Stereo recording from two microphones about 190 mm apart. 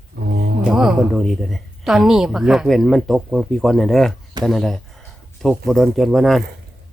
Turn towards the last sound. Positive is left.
turn(degrees=0)  # may be behind; listen again after turning